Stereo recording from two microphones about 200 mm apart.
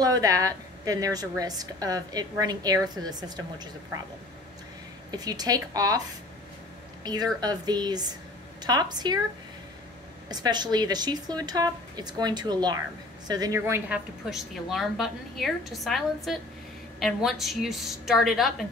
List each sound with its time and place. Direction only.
0.0 s a woman's voice: 15° right (ahead or behind)
5.1 s a woman's voice: 20° right (ahead or behind)
10.2 s a woman's voice: 20° right (ahead or behind); by 18.7 s centre (ahead or behind)